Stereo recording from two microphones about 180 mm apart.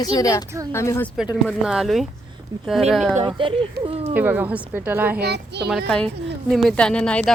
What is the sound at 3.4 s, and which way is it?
Speech, 30° right (ahead or behind).